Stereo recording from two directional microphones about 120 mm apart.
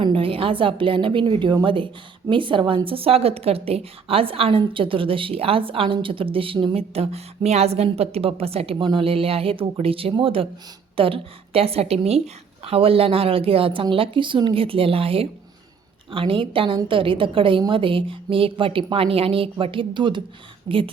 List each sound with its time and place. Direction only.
0.0 s a woman's voice: 50° right (ahead or behind)